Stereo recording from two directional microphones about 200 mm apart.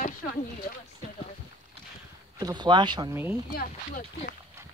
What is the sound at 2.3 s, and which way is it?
Speech, 20° right (ahead or behind).